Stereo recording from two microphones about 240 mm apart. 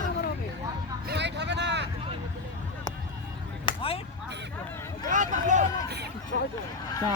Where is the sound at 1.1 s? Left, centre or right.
Right.